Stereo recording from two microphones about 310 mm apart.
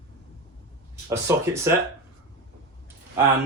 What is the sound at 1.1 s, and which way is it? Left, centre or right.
Speech, centre.